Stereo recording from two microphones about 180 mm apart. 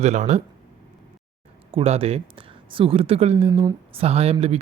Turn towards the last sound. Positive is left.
turn(degrees=-35)  # may be behind; listen again after turning